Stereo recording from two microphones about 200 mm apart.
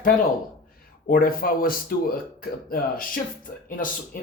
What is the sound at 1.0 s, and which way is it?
Speech, 45° left (ahead or behind).